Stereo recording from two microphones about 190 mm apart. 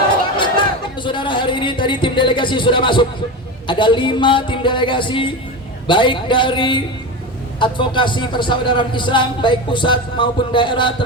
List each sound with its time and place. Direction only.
0.3 s speech: 25° left (ahead or behind)